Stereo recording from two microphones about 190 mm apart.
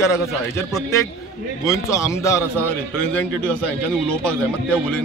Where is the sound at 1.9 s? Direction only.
15° left (ahead or behind).